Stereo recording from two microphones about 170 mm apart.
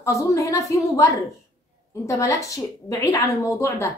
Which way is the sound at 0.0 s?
20° left (ahead or behind).